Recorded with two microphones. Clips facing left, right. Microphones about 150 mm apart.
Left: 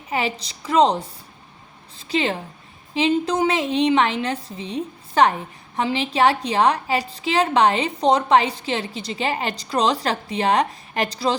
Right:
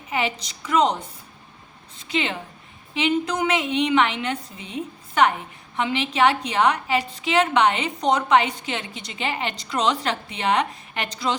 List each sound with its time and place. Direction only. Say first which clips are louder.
0.1 s a woman's voice: left 1 dB; 35° left (ahead or behind)